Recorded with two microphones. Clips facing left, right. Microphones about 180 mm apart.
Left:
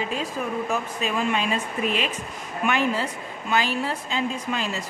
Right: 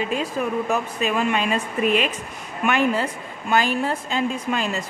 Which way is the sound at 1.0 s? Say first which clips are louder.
Right 5 dB; 60° right (ahead or behind).